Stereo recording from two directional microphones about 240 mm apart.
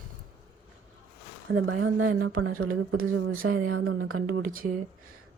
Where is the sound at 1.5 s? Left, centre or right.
Right.